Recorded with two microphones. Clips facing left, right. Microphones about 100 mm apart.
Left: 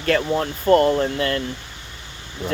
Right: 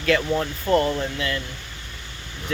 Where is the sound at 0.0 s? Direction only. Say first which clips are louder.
Left 1 dB; 40° left (ahead or behind).